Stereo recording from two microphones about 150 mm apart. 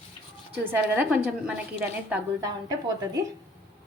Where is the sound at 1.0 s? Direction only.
5° right (ahead or behind).